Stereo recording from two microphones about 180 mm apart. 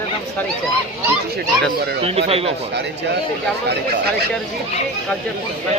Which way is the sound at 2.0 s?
35° right (ahead or behind).